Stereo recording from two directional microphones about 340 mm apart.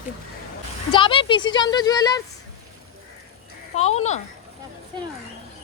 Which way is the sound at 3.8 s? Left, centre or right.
Centre.